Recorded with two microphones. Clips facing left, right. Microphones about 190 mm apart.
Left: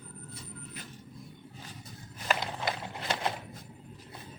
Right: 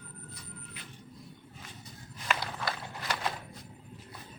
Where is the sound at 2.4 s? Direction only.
25° left (ahead or behind).